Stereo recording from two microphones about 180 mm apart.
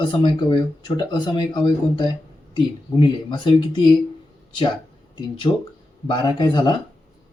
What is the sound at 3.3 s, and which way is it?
Speech, 25° left (ahead or behind).